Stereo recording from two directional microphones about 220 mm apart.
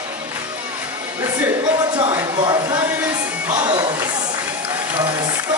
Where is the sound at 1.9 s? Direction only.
20° right (ahead or behind).